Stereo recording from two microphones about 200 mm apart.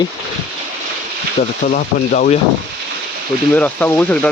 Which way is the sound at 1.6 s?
45° left (ahead or behind).